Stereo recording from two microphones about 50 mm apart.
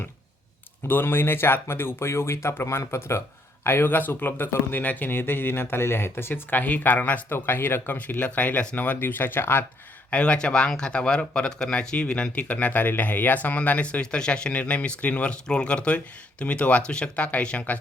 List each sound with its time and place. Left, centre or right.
0.9 s speech: left
7.3 s speech: left
7.9 s speech: left
10.1 s speech: left